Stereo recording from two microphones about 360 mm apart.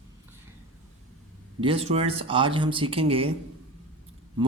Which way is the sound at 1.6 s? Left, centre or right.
Centre.